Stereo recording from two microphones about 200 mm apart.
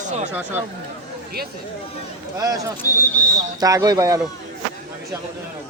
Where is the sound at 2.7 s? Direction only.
10° left (ahead or behind).